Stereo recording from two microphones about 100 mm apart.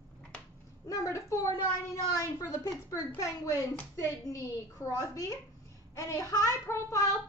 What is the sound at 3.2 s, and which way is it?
Speech, 35° left (ahead or behind).